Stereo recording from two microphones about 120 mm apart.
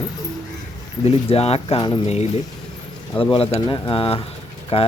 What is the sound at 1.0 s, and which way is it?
Speech, 60° left (ahead or behind).